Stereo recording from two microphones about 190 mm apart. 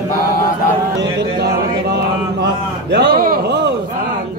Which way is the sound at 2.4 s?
60° right (ahead or behind).